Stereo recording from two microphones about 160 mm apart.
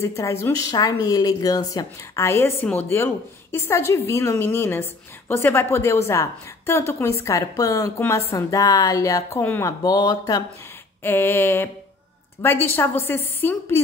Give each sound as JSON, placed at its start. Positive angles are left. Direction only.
{"t": 0.0, "sound": "a woman's voice", "side_deg": 20}
{"t": 11.0, "sound": "a woman's voice", "side_deg": 15}